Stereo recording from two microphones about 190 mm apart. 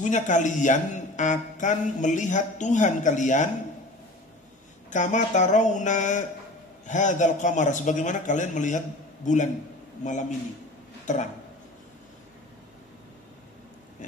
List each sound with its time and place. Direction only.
0.0 s speech: 40° left (ahead or behind)
4.9 s speech: 40° left (ahead or behind)